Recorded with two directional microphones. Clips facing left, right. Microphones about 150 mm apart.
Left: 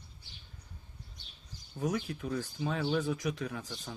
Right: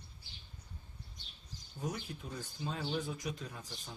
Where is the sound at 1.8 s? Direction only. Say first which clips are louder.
Left 8 dB; 85° left.